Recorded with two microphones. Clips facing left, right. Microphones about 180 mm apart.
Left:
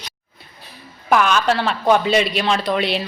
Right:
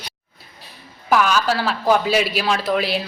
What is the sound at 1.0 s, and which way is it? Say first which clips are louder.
Speech: left 1 dB; 5° right (ahead or behind).